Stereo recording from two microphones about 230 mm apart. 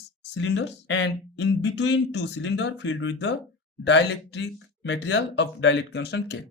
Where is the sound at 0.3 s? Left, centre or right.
Left.